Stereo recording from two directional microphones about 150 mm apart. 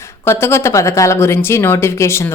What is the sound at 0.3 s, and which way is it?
A woman's voice, 15° left (ahead or behind).